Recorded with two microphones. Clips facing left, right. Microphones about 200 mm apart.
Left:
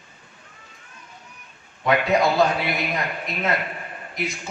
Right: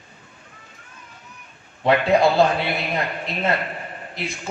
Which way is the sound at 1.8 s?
30° right (ahead or behind).